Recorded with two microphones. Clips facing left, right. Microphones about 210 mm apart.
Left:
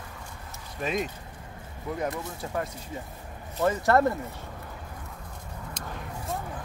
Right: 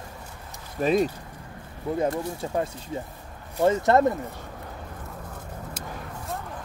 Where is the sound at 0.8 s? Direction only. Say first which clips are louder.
Right 8 dB; 35° right (ahead or behind); by 4.2 s 20° right (ahead or behind).